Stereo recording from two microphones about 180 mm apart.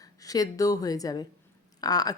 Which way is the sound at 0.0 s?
20° left (ahead or behind).